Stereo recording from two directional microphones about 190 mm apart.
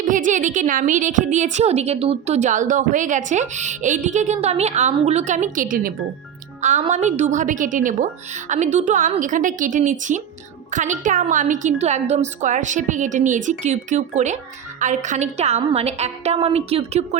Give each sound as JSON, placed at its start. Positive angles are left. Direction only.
{"t": 0.0, "sound": "a woman's voice", "side_deg": -45}